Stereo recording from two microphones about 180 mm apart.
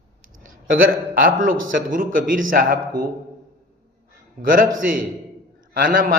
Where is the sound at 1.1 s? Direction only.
55° right (ahead or behind).